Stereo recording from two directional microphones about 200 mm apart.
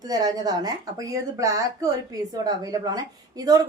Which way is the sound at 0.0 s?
20° right (ahead or behind).